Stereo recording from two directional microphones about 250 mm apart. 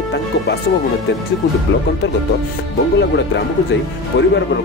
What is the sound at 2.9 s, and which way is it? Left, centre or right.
Speech, left.